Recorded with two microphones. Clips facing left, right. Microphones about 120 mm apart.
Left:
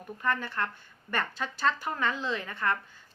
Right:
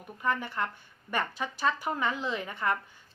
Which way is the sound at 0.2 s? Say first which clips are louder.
Even; 15° right (ahead or behind).